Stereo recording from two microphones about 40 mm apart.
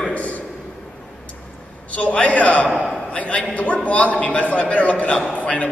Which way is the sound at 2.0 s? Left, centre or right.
Left.